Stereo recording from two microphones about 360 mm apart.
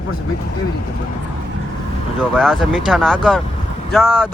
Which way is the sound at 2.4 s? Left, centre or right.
Centre.